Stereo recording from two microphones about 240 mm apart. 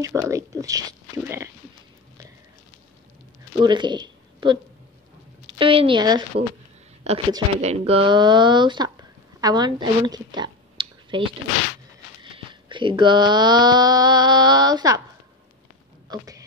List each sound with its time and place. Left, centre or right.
0.0 s speech: centre
3.6 s speech: centre
5.6 s a woman's voice: right
16.1 s a sound: centre